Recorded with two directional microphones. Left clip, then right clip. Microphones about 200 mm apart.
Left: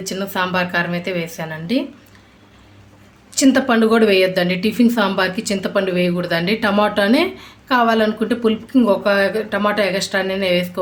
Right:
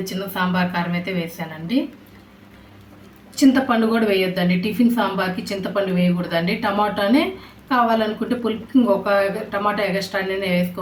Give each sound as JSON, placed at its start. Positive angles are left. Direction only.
{"t": 0.0, "sound": "speech", "side_deg": 50}
{"t": 3.3, "sound": "a woman's voice", "side_deg": 55}